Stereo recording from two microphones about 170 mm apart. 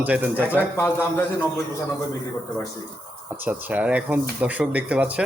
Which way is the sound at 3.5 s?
10° right (ahead or behind).